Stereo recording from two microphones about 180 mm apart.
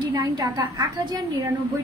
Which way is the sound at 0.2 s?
20° right (ahead or behind).